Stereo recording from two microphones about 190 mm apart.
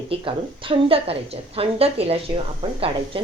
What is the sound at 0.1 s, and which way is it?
A woman's voice, 25° right (ahead or behind).